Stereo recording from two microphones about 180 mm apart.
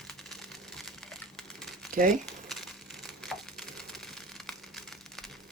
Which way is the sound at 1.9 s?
50° right (ahead or behind).